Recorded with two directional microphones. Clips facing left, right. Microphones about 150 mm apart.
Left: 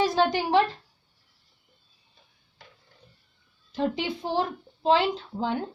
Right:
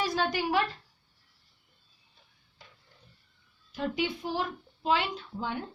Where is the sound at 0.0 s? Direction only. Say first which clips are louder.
Left 6 dB; 25° left (ahead or behind).